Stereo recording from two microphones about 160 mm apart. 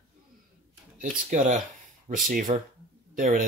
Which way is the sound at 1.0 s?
50° right (ahead or behind).